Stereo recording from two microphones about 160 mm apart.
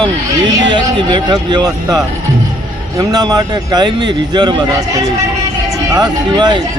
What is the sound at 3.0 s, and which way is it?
Speech, 25° right (ahead or behind).